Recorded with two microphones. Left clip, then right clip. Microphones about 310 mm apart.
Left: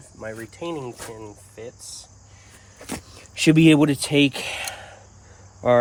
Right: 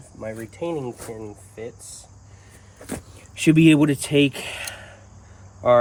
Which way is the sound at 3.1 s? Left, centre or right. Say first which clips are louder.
Left 4 dB; centre.